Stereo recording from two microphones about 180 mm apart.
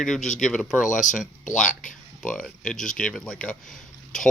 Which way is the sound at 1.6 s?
45° left (ahead or behind).